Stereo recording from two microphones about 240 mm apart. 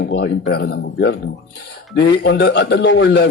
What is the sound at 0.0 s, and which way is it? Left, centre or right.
A man's voice, left.